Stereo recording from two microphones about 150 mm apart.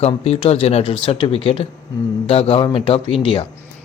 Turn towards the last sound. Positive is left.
turn(degrees=35)  # may be behind; listen again after turning